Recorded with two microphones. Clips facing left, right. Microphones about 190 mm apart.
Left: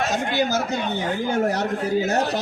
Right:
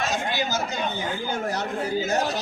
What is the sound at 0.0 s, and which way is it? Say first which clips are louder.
Speech: left 4 dB; 60° left (ahead or behind).